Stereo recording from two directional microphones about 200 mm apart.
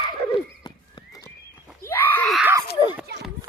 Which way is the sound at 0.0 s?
20° left (ahead or behind).